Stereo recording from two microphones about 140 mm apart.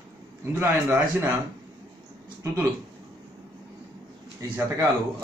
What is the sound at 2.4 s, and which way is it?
Speech, 25° right (ahead or behind).